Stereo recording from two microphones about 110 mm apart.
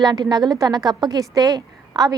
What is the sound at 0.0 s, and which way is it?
A woman's voice, 40° right (ahead or behind).